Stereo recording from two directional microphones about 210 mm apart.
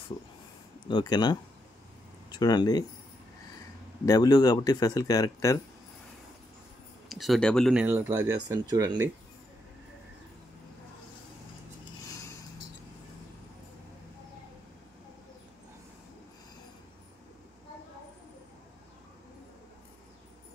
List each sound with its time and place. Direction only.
0.8 s speech: 20° left (ahead or behind)
4.0 s speech: 15° left (ahead or behind)
7.1 s speech: centre (ahead or behind)
7.8 s speech: 10° right (ahead or behind)